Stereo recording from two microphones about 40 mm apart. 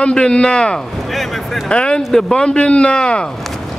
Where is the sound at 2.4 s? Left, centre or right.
Left.